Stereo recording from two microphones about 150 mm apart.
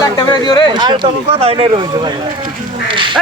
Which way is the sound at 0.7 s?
30° right (ahead or behind).